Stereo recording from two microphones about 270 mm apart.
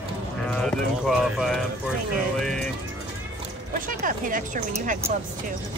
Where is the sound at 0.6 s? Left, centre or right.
Centre.